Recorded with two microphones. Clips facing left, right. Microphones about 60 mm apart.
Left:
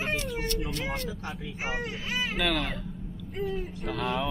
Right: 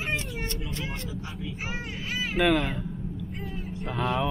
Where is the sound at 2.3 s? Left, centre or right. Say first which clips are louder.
Right 8 dB; centre.